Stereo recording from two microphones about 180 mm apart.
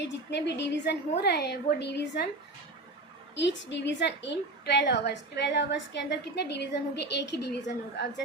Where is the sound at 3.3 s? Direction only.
75° left (ahead or behind).